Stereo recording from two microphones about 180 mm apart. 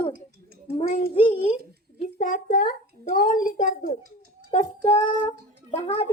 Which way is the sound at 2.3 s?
50° left (ahead or behind).